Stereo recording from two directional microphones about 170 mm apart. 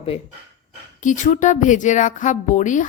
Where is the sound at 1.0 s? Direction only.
45° left (ahead or behind).